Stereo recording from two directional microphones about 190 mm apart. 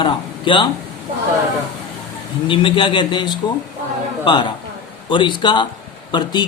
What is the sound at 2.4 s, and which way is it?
Speech, 25° left (ahead or behind).